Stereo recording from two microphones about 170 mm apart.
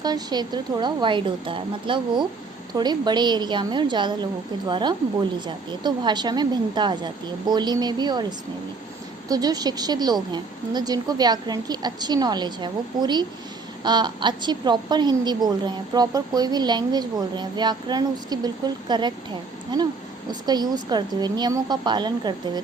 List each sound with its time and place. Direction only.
0.0 s a woman's voice: 25° right (ahead or behind)
9.3 s a woman's voice: 20° right (ahead or behind)